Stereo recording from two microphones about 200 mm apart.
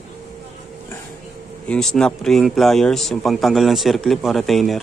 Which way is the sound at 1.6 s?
5° left (ahead or behind).